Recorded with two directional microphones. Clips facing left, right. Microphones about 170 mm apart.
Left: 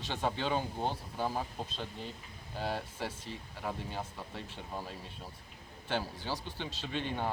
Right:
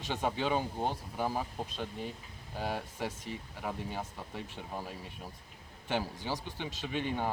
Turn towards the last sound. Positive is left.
turn(degrees=-10)  # may be behind; listen again after turning